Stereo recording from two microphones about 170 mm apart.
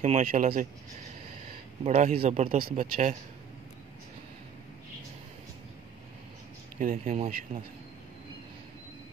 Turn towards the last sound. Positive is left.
turn(degrees=-35)  # may be behind; listen again after turning